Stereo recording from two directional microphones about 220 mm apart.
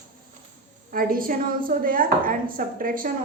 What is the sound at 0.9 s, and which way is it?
A woman's voice, 40° right (ahead or behind).